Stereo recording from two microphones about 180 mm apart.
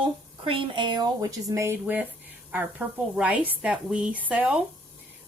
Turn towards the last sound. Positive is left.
turn(degrees=-10)  # may be behind; listen again after turning